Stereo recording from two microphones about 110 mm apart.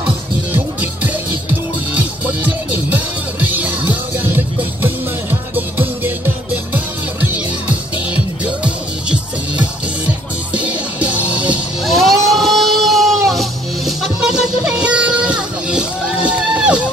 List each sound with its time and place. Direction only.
0.5 s music: 15° right (ahead or behind)
8.5 s music: 10° right (ahead or behind)
11.8 s music: centre (ahead or behind)